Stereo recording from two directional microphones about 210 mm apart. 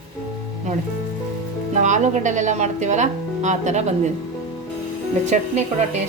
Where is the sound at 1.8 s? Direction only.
35° right (ahead or behind).